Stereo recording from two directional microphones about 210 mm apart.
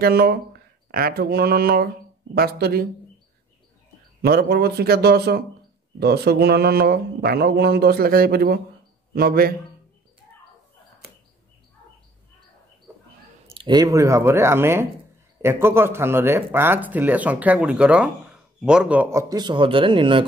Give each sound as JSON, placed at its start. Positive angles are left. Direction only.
{"t": 0.0, "sound": "a sound", "side_deg": -50}
{"t": 2.3, "sound": "speech", "side_deg": -45}
{"t": 4.2, "sound": "speech", "side_deg": -50}
{"t": 13.5, "sound": "speech", "side_deg": -20}